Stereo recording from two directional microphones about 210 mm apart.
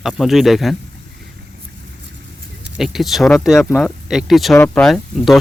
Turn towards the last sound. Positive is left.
turn(degrees=0)  # may be behind; listen again after turning